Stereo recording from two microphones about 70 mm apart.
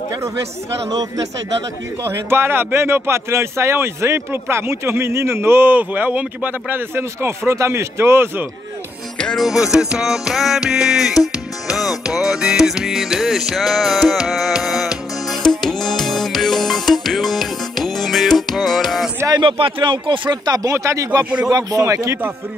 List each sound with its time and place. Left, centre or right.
0.8 s speech: right
2.0 s speech: right
9.4 s music: centre
19.9 s speech: right
20.7 s speech: right
21.5 s speech: right